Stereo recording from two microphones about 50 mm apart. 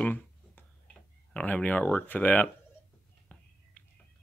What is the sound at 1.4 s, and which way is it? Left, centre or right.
Speech, left.